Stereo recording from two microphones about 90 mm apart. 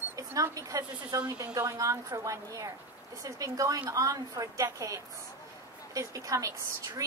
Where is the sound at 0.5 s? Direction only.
40° right (ahead or behind).